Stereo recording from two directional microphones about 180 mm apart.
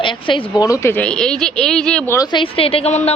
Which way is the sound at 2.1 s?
20° left (ahead or behind).